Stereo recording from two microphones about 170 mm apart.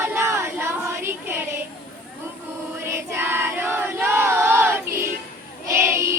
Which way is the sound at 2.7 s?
15° right (ahead or behind).